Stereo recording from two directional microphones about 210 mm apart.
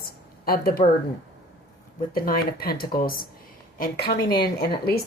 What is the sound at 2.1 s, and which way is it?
A woman's voice, 45° left (ahead or behind).